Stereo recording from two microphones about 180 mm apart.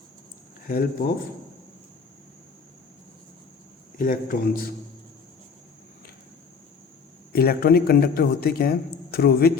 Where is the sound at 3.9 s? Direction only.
50° left (ahead or behind).